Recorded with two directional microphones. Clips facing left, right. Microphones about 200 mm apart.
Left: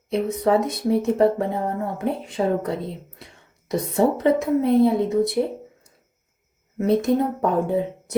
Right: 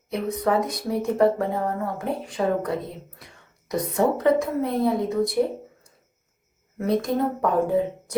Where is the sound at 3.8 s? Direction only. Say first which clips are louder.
Left 2 dB; 25° left (ahead or behind).